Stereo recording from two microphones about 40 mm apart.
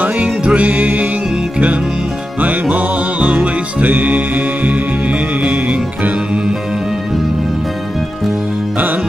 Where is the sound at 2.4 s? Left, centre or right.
Right.